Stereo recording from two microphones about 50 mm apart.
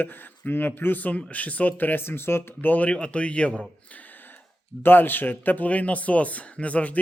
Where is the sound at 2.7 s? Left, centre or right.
Left.